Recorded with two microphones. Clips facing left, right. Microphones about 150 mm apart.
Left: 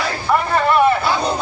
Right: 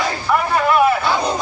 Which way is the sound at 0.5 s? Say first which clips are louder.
Even; 5° right (ahead or behind).